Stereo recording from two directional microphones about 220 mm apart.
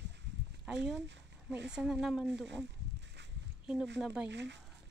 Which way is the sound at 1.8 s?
Centre (ahead or behind).